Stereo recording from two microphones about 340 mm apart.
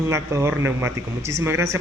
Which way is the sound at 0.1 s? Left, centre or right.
Centre.